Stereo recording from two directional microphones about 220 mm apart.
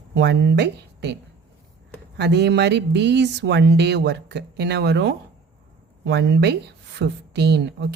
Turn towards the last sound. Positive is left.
turn(degrees=-50)  # may be behind; listen again after turning